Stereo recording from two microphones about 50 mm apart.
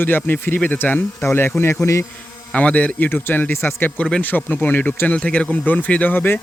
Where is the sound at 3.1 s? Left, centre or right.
Left.